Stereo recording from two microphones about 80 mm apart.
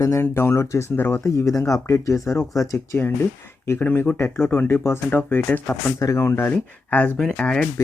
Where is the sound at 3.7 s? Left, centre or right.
Left.